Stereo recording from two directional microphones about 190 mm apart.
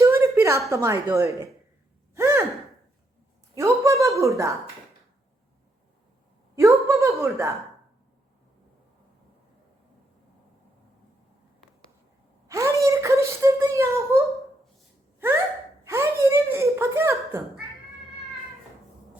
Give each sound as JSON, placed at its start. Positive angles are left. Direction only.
{"t": 0.0, "sound": "a sound", "side_deg": -15}
{"t": 0.7, "sound": "speech", "side_deg": -15}
{"t": 2.1, "sound": "gasp", "side_deg": -15}
{"t": 3.5, "sound": "a sound", "side_deg": -15}
{"t": 6.6, "sound": "a woman's voice", "side_deg": -15}
{"t": 12.5, "sound": "speech", "side_deg": -15}
{"t": 15.8, "sound": "speech", "side_deg": -15}